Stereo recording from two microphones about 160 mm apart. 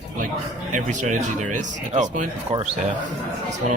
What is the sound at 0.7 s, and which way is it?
Speech, 50° right (ahead or behind).